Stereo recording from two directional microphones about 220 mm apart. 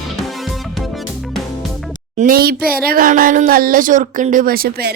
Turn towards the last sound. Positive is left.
turn(degrees=-45)  # may be behind; listen again after turning